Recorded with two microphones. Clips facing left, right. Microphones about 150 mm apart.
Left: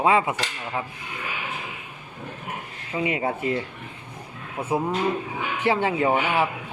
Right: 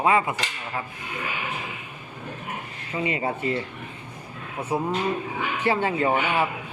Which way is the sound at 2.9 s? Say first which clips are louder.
Left 1 dB; 10° left (ahead or behind).